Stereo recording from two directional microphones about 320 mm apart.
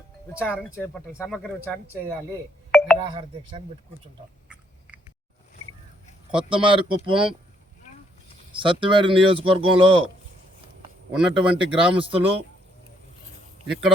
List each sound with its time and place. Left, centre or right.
0.3 s speech: centre
2.7 s telephone dialing: centre
3.0 s speech: centre
4.9 s biting: centre
6.3 s speech: centre
8.5 s speech: centre
11.1 s speech: centre
11.9 s speech: centre